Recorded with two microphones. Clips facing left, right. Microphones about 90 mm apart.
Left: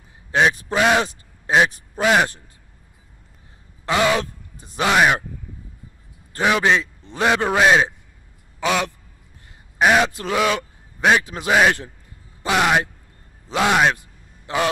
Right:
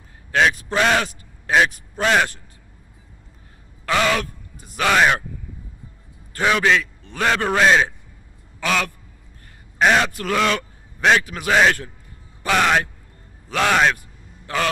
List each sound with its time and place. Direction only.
0.3 s a man's voice: 20° left (ahead or behind)
3.8 s speech: 15° left (ahead or behind)
6.3 s a man's voice: 20° left (ahead or behind)
9.8 s a man's voice: 5° left (ahead or behind)
10.0 s a man's voice: 20° left (ahead or behind)
11.2 s a man's voice: 25° left (ahead or behind)
12.4 s a man's voice: 15° left (ahead or behind)
13.5 s a sound: 15° left (ahead or behind)